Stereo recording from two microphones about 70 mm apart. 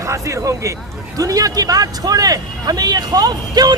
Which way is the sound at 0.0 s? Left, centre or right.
Right.